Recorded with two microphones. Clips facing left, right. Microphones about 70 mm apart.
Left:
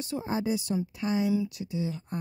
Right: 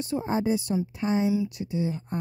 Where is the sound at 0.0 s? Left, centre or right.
Right.